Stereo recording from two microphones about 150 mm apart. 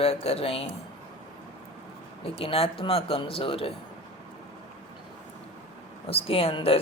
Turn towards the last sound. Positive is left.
turn(degrees=40)  # may be behind; listen again after turning